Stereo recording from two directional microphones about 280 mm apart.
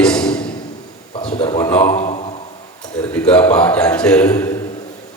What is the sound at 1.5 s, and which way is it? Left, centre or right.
Speech, centre.